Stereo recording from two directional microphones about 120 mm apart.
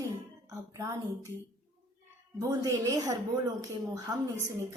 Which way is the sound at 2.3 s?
30° right (ahead or behind).